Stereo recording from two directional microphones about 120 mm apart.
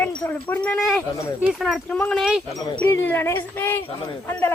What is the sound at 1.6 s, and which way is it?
Speech, centre (ahead or behind).